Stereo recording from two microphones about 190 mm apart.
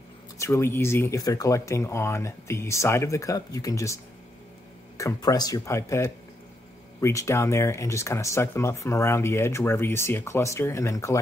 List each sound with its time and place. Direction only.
0.4 s speech: 15° left (ahead or behind)